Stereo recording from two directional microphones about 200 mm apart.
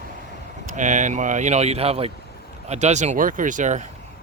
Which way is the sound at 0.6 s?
40° right (ahead or behind).